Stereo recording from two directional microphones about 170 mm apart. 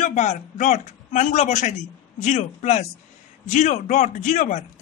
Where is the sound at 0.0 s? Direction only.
45° left (ahead or behind).